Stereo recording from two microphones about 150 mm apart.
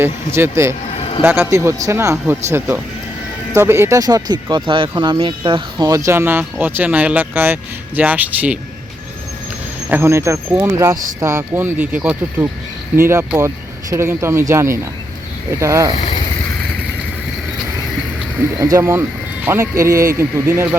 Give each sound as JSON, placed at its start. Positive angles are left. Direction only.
{"t": 0.0, "sound": "speech", "side_deg": -15}
{"t": 1.5, "sound": "speech", "side_deg": -20}
{"t": 9.9, "sound": "speech", "side_deg": -15}
{"t": 18.6, "sound": "speech", "side_deg": -20}